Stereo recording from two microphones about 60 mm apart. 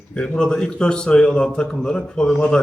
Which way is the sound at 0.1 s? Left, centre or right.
Centre.